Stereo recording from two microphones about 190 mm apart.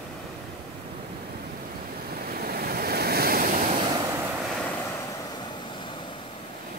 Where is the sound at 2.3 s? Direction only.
50° right (ahead or behind).